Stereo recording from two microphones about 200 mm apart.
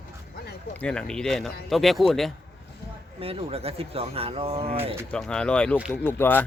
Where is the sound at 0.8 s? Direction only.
5° left (ahead or behind).